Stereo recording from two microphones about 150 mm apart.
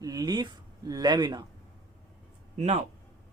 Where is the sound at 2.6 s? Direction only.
50° right (ahead or behind).